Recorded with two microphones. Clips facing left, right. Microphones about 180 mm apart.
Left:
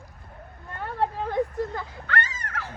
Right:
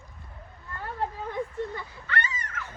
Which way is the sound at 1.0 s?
70° left (ahead or behind).